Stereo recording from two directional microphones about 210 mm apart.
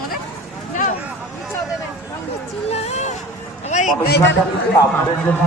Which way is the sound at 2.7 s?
30° left (ahead or behind).